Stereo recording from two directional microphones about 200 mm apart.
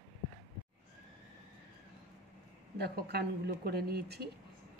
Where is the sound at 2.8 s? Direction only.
55° right (ahead or behind).